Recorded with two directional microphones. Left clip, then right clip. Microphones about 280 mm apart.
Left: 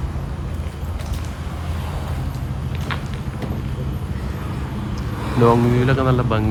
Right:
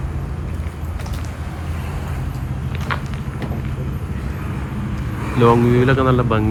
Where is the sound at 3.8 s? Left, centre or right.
Left.